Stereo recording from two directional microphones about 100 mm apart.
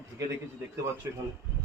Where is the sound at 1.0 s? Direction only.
30° right (ahead or behind).